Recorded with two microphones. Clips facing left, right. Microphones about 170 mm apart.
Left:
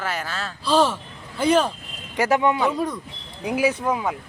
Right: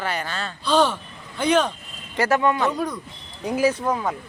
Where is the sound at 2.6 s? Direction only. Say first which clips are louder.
Left 1 dB; centre (ahead or behind).